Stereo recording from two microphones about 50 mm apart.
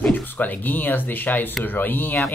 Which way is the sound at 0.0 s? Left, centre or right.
Left.